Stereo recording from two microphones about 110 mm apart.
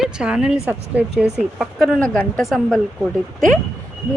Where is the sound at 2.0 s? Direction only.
10° left (ahead or behind).